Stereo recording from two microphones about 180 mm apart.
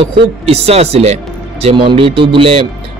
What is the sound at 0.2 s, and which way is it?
Speech, 35° right (ahead or behind).